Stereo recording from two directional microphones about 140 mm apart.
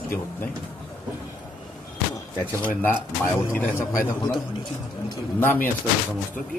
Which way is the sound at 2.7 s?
15° left (ahead or behind).